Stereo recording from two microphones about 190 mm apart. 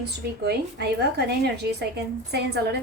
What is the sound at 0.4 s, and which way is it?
Speech, 60° right (ahead or behind).